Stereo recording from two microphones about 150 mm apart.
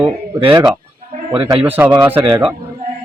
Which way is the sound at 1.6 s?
10° right (ahead or behind).